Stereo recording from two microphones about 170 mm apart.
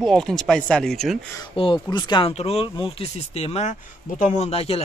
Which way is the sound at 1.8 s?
25° left (ahead or behind).